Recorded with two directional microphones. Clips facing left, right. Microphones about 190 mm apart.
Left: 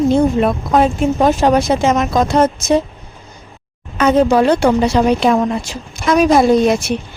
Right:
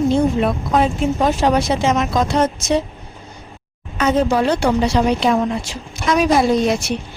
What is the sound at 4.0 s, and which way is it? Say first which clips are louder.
Speech: left 5 dB; 65° left (ahead or behind).